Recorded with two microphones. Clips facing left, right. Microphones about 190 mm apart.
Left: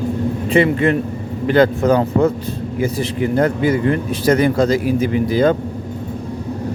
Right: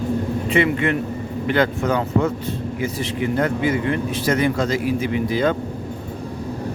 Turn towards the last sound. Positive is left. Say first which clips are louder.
# left 5 dB
turn(degrees=40)  # may be behind; listen again after turning